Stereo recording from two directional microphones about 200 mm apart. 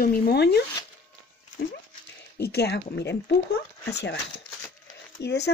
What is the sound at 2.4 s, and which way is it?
Speech, 55° left (ahead or behind).